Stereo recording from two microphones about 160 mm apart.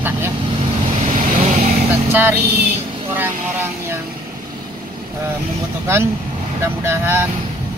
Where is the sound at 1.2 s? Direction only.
50° right (ahead or behind).